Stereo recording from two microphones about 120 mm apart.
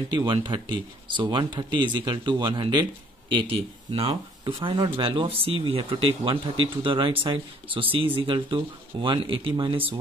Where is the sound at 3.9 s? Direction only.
55° right (ahead or behind).